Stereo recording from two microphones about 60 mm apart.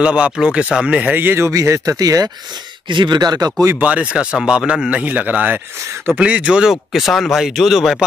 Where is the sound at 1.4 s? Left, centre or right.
Right.